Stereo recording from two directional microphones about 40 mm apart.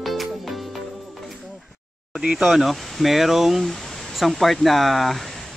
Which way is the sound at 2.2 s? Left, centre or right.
Right.